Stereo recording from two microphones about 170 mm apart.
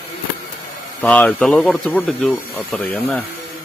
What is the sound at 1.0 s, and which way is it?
Speech, 10° left (ahead or behind).